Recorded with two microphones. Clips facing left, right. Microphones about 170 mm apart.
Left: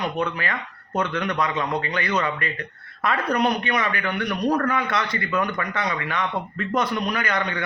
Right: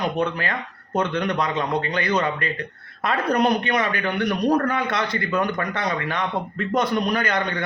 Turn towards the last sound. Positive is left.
turn(degrees=-35)  # may be behind; listen again after turning